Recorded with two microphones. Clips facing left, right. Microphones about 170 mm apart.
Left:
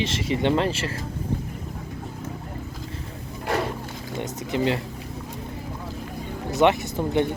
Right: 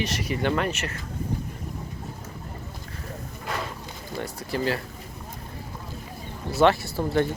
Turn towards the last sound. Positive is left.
turn(degrees=20)  # may be behind; listen again after turning